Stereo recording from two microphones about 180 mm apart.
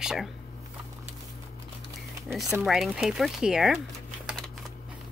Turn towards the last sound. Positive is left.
turn(degrees=0)  # may be behind; listen again after turning